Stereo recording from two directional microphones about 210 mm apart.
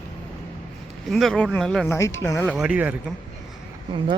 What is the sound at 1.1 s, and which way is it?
Speech, centre (ahead or behind).